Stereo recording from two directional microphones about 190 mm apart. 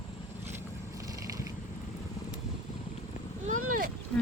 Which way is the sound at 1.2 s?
15° right (ahead or behind).